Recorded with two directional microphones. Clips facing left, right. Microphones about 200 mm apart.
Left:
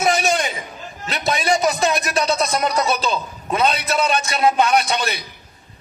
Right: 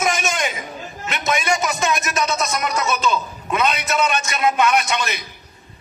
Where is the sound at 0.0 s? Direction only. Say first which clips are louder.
Left 3 dB; 35° left (ahead or behind).